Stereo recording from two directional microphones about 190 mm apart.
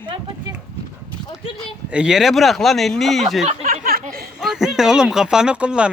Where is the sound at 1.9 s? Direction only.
5° right (ahead or behind).